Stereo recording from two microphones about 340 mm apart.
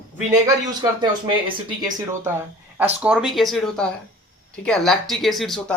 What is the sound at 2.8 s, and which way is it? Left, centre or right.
Speech, centre.